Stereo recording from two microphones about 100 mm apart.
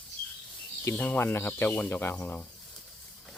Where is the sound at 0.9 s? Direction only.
15° left (ahead or behind).